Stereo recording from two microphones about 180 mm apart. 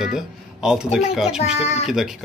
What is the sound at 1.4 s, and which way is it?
Child singing, 35° left (ahead or behind).